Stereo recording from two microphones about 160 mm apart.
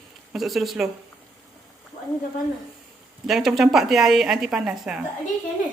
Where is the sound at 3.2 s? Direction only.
Centre (ahead or behind).